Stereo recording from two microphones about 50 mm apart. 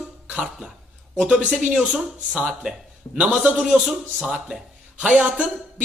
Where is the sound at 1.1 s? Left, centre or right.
Centre.